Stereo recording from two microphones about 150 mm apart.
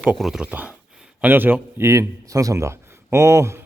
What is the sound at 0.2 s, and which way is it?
A man's voice, 5° right (ahead or behind).